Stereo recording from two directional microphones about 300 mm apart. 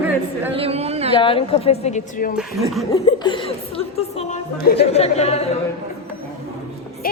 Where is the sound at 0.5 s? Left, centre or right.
Centre.